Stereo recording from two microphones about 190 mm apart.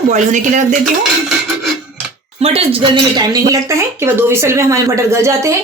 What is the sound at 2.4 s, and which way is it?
Speech, 30° right (ahead or behind).